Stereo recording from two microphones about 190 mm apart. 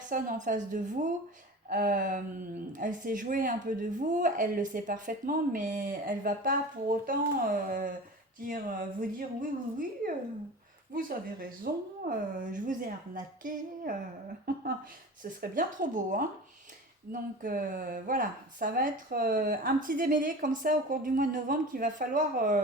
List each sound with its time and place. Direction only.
0.1 s speech: 45° right (ahead or behind)
15.2 s speech: 45° right (ahead or behind)